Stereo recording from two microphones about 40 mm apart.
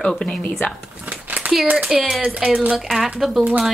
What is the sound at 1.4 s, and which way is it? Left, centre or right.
Speech, right.